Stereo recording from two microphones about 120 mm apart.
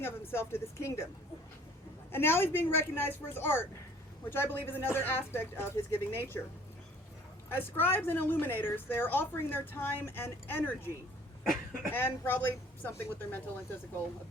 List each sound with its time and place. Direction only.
0.0 s a woman's voice: 20° left (ahead or behind)
2.1 s a woman's voice: 20° left (ahead or behind)
7.5 s a woman's voice: 20° left (ahead or behind)